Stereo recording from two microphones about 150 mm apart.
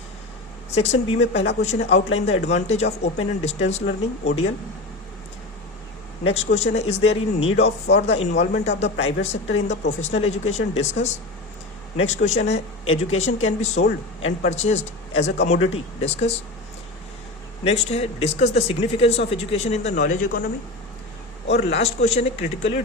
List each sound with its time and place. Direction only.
0.7 s speech: 45° left (ahead or behind)
6.2 s speech: 45° left (ahead or behind)
17.6 s speech: 45° left (ahead or behind)
21.5 s speech: 45° left (ahead or behind)